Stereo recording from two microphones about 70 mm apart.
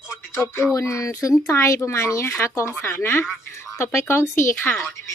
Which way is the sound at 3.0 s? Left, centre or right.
Left.